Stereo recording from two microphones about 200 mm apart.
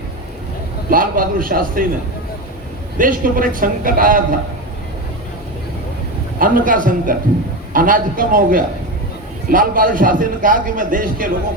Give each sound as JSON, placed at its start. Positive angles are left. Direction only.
{"t": 0.9, "sound": "a man's voice", "side_deg": -45}
{"t": 3.0, "sound": "a man's voice", "side_deg": -45}
{"t": 6.4, "sound": "a man's voice", "side_deg": -45}